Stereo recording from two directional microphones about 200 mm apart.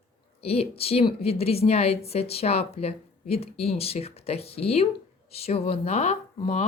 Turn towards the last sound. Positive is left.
turn(degrees=35)  # may be behind; listen again after turning